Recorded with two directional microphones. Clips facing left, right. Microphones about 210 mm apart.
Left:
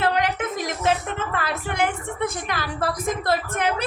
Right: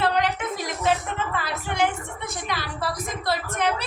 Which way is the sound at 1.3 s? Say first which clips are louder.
Left 2 dB; 55° left (ahead or behind).